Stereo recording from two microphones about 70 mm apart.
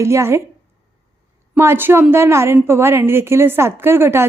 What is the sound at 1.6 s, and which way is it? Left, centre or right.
A woman's voice, right.